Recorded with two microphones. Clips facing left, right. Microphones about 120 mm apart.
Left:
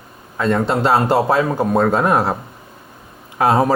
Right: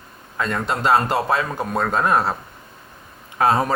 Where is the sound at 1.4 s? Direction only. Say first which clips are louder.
Left 7 dB; 25° left (ahead or behind).